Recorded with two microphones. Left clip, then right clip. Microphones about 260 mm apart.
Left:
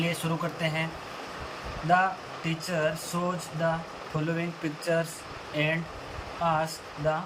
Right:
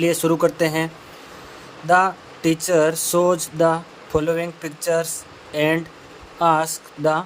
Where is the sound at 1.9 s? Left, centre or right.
Centre.